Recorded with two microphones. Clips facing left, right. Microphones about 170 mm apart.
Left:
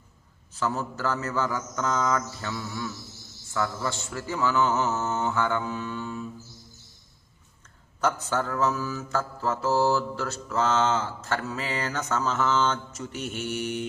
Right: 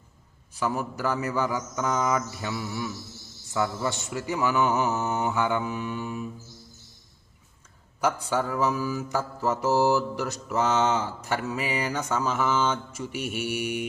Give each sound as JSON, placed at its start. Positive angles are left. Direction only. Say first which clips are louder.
{"t": 0.5, "sound": "mantra", "louder": "right 1 dB", "side_deg": -15}
{"t": 8.0, "sound": "mantra", "louder": "right 1 dB", "side_deg": -10}